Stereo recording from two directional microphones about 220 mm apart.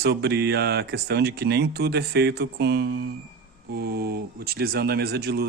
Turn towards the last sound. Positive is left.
turn(degrees=-45)  # may be behind; listen again after turning